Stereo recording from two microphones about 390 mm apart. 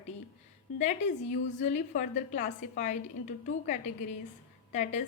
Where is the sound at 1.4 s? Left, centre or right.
Centre.